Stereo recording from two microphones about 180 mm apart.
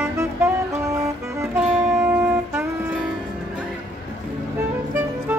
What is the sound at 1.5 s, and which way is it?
Music, centre (ahead or behind).